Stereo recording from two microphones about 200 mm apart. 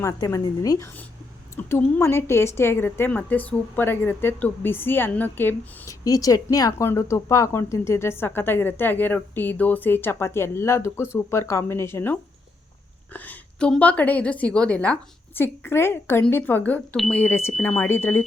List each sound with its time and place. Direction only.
0.0 s a woman's voice: 15° left (ahead or behind)